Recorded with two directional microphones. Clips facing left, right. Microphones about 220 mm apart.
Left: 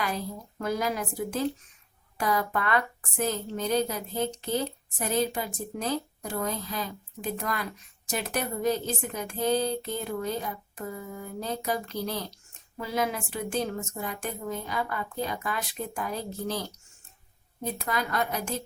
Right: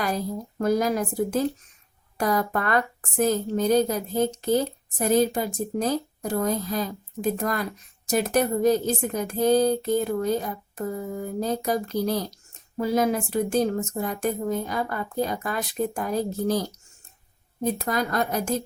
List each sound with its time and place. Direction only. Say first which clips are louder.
0.0 s a woman's voice: right 5 dB; 45° right (ahead or behind)